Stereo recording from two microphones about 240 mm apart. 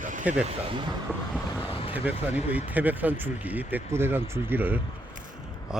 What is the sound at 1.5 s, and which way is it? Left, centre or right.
Vehicle, centre.